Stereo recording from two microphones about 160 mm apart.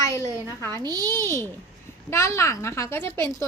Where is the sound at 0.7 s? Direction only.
25° right (ahead or behind).